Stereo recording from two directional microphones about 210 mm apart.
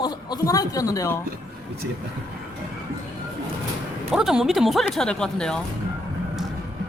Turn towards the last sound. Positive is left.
turn(degrees=5)  # may be behind; listen again after turning